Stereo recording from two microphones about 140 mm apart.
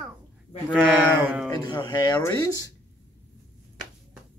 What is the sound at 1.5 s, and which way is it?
Speech, 30° left (ahead or behind).